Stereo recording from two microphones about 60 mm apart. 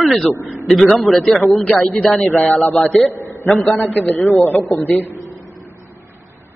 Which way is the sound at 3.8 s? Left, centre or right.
Left.